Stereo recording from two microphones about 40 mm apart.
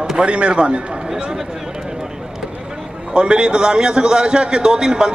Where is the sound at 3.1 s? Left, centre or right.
Right.